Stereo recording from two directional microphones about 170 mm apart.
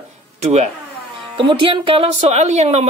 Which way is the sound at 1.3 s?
30° right (ahead or behind).